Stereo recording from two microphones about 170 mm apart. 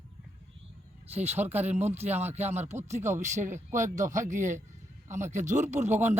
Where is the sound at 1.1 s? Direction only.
40° right (ahead or behind).